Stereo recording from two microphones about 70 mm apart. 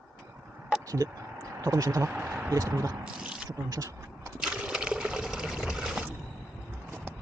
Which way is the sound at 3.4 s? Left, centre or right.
Right.